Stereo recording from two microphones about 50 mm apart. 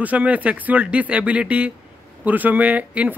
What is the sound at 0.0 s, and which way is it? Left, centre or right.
Speech, right.